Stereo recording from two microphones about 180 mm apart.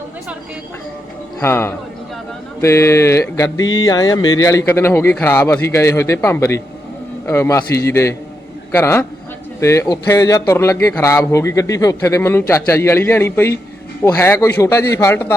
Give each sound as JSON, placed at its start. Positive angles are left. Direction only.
{"t": 1.4, "sound": "a man's voice", "side_deg": 15}
{"t": 3.8, "sound": "music", "side_deg": 20}
{"t": 4.4, "sound": "a man's voice", "side_deg": 15}